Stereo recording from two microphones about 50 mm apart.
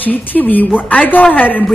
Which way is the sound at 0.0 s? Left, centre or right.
Left.